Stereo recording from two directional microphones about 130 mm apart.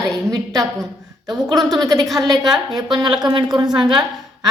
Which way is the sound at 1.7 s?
30° right (ahead or behind).